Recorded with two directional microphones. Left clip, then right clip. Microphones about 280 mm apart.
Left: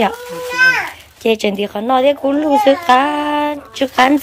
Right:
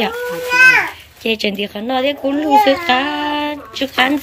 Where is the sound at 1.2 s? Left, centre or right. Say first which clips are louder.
Left 3 dB; centre.